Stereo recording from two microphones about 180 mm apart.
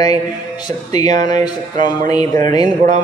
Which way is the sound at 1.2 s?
20° left (ahead or behind).